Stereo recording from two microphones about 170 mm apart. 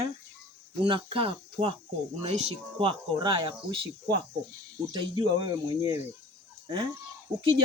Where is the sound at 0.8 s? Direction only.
30° right (ahead or behind).